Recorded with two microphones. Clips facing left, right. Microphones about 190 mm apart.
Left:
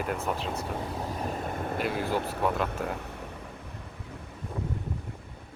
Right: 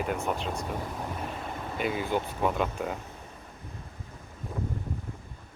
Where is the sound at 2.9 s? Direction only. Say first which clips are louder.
Left 3 dB; 65° left (ahead or behind).